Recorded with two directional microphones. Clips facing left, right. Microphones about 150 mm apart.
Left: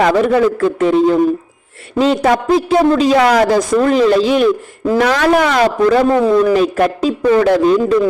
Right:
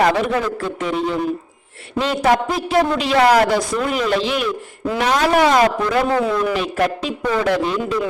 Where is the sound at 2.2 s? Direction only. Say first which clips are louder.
Left 5 dB; 40° left (ahead or behind).